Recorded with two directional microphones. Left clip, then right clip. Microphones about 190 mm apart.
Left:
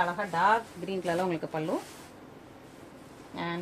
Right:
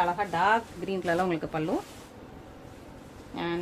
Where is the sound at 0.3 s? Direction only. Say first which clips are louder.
Right 1 dB; 35° right (ahead or behind).